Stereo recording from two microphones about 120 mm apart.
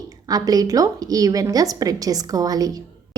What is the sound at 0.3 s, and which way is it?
A woman's voice, 30° right (ahead or behind).